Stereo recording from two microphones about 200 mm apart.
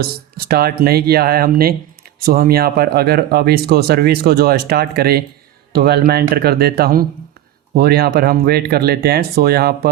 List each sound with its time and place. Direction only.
0.0 s speech: 50° right (ahead or behind)